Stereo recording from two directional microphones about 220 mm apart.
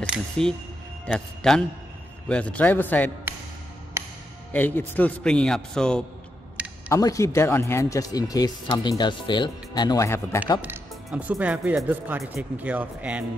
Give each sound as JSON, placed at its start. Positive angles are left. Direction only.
{"t": 0.1, "sound": "speech", "side_deg": 5}
{"t": 4.5, "sound": "speech", "side_deg": 10}
{"t": 6.9, "sound": "speech", "side_deg": 15}
{"t": 10.6, "sound": "speech", "side_deg": -5}